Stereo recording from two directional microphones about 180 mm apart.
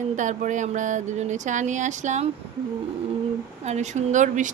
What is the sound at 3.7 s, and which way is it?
Speech, 40° right (ahead or behind).